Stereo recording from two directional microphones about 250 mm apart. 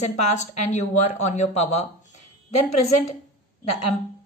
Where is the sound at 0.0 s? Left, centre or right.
Left.